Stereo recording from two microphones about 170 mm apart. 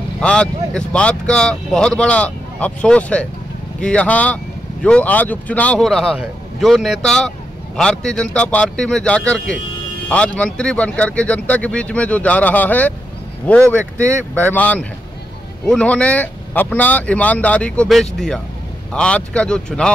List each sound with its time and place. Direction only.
0.2 s speech: 5° left (ahead or behind)
13.7 s speech: 15° right (ahead or behind)
14.3 s speech: 10° left (ahead or behind)